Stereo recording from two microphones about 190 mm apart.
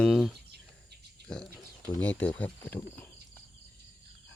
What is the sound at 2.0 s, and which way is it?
Speech, 10° left (ahead or behind).